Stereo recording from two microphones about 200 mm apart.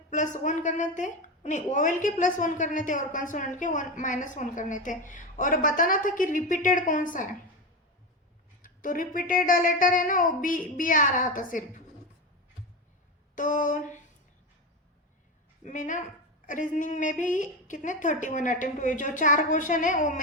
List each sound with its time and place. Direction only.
0.1 s a woman's voice: 40° left (ahead or behind)
8.6 s a sound: 45° left (ahead or behind)
13.3 s a woman's voice: 40° left (ahead or behind)
15.6 s a woman's voice: 40° left (ahead or behind)